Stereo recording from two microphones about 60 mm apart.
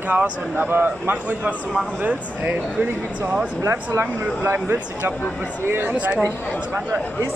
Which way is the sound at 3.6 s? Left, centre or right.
Right.